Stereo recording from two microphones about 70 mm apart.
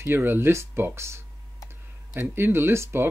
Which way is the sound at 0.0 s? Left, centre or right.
Right.